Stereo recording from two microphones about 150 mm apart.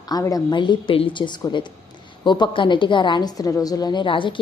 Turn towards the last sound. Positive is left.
turn(degrees=35)  # may be behind; listen again after turning